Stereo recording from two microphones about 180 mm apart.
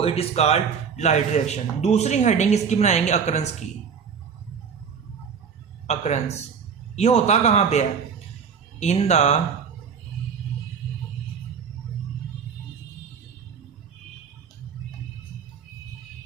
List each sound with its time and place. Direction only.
0.0 s a man's voice: 35° left (ahead or behind)
5.9 s a man's voice: 40° left (ahead or behind)